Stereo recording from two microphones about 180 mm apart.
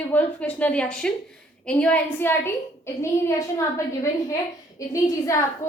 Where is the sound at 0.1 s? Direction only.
10° left (ahead or behind).